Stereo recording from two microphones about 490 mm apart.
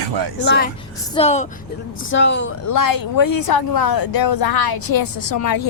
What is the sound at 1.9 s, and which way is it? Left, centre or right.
Speech, left.